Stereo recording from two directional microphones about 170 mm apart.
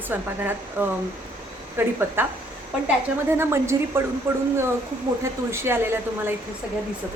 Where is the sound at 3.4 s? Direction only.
15° right (ahead or behind).